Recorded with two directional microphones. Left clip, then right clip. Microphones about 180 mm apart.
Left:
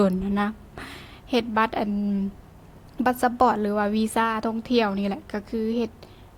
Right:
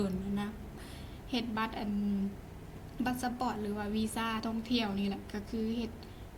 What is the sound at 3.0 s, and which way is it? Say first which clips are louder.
A woman's voice: left 15 dB; 45° left (ahead or behind).